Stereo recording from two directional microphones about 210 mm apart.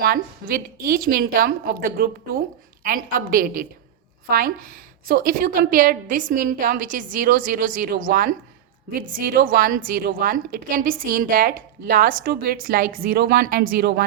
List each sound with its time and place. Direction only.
0.0 s a woman's voice: 45° right (ahead or behind)